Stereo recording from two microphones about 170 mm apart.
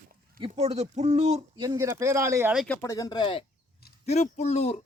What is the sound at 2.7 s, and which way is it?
Speech, 15° left (ahead or behind).